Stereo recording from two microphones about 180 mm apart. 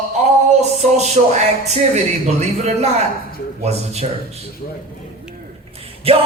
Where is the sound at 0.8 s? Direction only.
40° right (ahead or behind).